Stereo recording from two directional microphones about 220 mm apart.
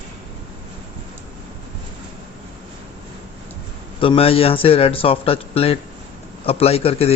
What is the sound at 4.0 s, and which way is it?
A man's voice, 25° left (ahead or behind).